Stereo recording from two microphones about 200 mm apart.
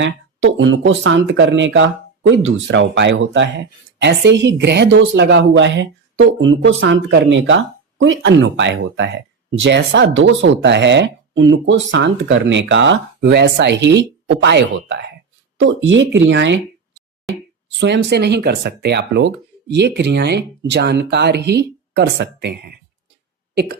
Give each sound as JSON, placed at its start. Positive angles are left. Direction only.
{"t": 0.0, "sound": "speech", "side_deg": -65}
{"t": 17.7, "sound": "speech", "side_deg": -60}